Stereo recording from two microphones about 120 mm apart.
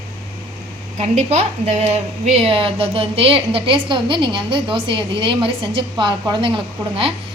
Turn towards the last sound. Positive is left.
turn(degrees=-45)  # may be behind; listen again after turning